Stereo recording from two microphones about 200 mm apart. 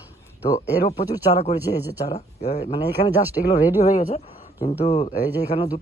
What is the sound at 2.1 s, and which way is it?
Speech, 35° left (ahead or behind).